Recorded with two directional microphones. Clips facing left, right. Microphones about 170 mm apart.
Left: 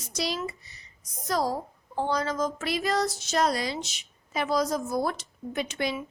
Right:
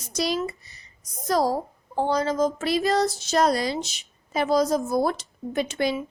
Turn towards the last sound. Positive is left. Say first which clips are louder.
# right 5 dB
turn(degrees=-35)  # may be behind; listen again after turning